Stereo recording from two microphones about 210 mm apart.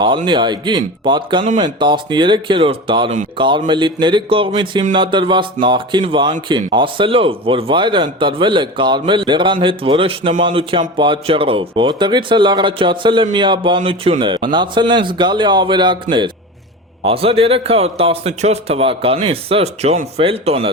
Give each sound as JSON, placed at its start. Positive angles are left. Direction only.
{"t": 0.3, "sound": "a man's voice", "side_deg": -20}